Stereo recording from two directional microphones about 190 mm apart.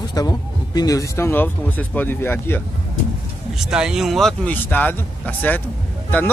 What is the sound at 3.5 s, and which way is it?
A man's voice, 5° right (ahead or behind).